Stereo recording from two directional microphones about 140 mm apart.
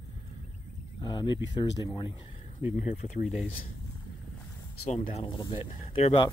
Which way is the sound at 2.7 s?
60° left (ahead or behind).